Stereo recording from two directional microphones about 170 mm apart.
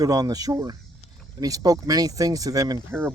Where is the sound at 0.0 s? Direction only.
20° right (ahead or behind).